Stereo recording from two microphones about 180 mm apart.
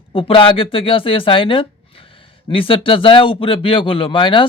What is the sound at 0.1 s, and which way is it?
Speech, 30° left (ahead or behind).